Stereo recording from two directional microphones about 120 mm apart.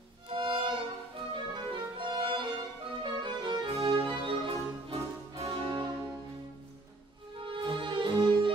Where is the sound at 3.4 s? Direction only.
35° right (ahead or behind).